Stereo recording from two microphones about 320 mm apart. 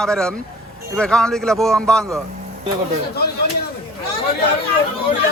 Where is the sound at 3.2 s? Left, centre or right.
Left.